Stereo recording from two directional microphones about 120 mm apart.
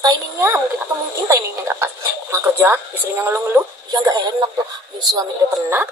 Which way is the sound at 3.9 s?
35° right (ahead or behind).